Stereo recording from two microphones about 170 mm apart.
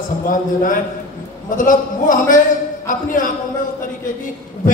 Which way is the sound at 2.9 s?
50° left (ahead or behind).